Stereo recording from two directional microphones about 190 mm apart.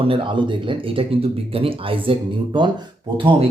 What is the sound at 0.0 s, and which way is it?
Speech, 25° right (ahead or behind).